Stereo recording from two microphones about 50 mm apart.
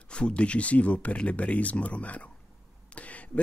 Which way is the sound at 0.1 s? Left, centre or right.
Left.